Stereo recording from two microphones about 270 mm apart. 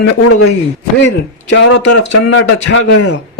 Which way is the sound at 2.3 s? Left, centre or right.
Left.